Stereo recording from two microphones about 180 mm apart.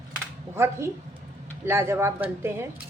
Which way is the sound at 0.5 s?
15° right (ahead or behind).